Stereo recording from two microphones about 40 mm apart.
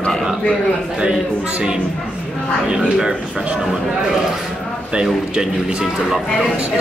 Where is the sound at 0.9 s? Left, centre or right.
Right.